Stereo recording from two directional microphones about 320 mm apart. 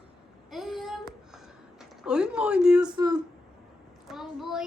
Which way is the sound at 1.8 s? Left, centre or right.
Centre.